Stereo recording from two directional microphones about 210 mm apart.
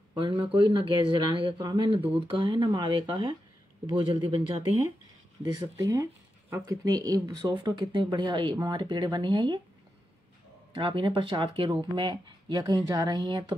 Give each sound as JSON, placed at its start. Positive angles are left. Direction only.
{"t": 0.1, "sound": "speech", "side_deg": -25}
{"t": 10.7, "sound": "speech", "side_deg": -25}